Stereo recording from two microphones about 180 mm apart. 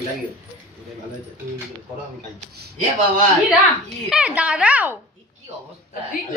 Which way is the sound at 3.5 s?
5° right (ahead or behind).